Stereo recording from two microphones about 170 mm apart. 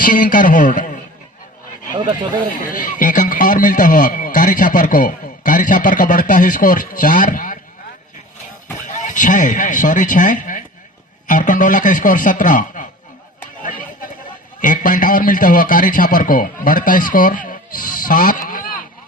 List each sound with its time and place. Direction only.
0.0 s speech: 55° left (ahead or behind)
2.0 s speech: 25° right (ahead or behind)
3.0 s speech: 50° left (ahead or behind)
8.9 s speech: 50° left (ahead or behind)
14.6 s a man's voice: 50° left (ahead or behind)